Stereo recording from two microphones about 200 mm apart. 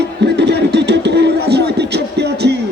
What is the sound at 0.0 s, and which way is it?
Music, 55° right (ahead or behind).